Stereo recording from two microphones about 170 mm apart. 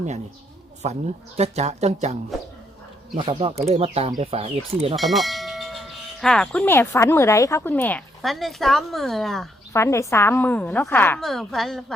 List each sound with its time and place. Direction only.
0.8 s speech: 45° right (ahead or behind)
3.2 s speech: 30° right (ahead or behind)
4.9 s a sound: centre (ahead or behind)
9.7 s a woman's voice: 15° left (ahead or behind)
11.2 s a woman's voice: centre (ahead or behind)